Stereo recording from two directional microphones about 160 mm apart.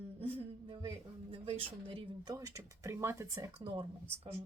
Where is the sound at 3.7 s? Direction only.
35° right (ahead or behind).